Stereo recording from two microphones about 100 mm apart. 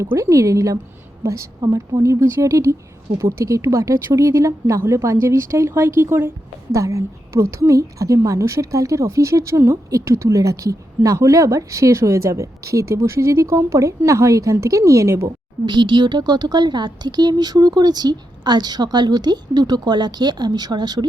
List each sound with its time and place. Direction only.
0.0 s a woman's voice: 30° right (ahead or behind)
15.6 s speech: 50° right (ahead or behind)